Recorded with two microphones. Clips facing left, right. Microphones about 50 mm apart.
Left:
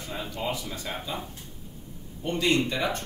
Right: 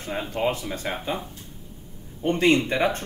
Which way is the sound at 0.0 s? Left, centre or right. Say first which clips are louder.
Right 7 dB; right.